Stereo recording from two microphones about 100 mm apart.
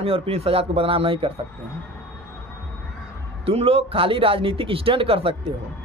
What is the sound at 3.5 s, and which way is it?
Speech, 70° right (ahead or behind).